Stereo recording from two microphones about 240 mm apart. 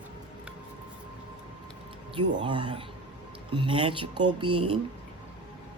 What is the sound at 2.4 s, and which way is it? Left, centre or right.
Speech, centre.